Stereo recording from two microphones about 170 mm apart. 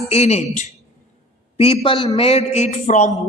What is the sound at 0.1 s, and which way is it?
A man's voice, 40° left (ahead or behind).